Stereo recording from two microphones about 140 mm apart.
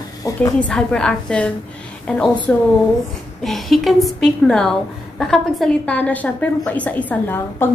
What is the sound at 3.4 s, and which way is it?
A woman's voice, centre (ahead or behind).